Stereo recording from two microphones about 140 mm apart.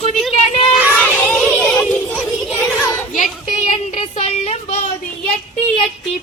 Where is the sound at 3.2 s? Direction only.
60° left (ahead or behind).